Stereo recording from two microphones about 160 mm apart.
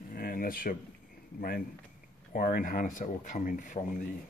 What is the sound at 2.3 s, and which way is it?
Speech, 60° left (ahead or behind).